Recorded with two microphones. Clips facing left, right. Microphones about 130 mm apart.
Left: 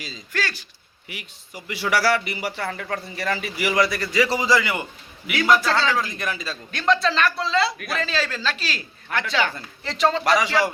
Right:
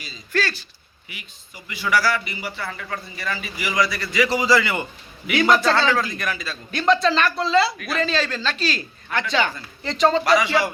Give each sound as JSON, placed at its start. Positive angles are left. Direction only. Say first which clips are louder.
{"t": 0.3, "sound": "a man's voice", "louder": "right 4 dB", "side_deg": 15}
{"t": 1.0, "sound": "a man's voice", "louder": "left 4 dB", "side_deg": 75}
{"t": 2.7, "sound": "a man's voice", "louder": "left 3 dB", "side_deg": 70}
{"t": 4.1, "sound": "a man's voice", "louder": "right 2 dB", "side_deg": 35}
{"t": 4.4, "sound": "a man's voice", "louder": "right 2 dB", "side_deg": 15}
{"t": 5.3, "sound": "a man's voice", "louder": "right 2 dB", "side_deg": -25}
{"t": 5.9, "sound": "speech", "louder": "right 2 dB", "side_deg": 20}
{"t": 6.7, "sound": "a man's voice", "louder": "right 3 dB", "side_deg": 0}